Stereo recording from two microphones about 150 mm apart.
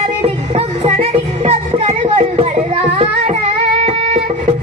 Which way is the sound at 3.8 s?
45° right (ahead or behind).